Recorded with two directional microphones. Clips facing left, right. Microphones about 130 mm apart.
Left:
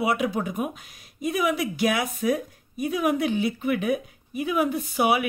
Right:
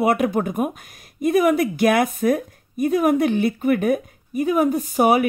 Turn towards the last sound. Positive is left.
turn(degrees=-40)  # may be behind; listen again after turning